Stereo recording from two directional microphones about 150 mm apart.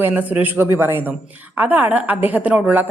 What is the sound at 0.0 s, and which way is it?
A woman's voice, 10° right (ahead or behind).